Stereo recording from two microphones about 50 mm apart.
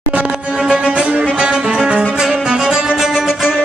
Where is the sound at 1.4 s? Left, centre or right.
Right.